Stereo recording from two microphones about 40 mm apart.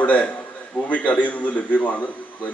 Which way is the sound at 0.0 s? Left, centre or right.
Left.